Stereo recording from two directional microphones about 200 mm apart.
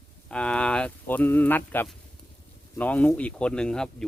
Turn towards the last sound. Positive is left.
turn(degrees=5)  # may be behind; listen again after turning